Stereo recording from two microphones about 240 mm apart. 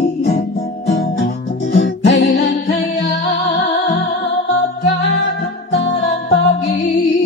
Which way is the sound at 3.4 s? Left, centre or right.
Left.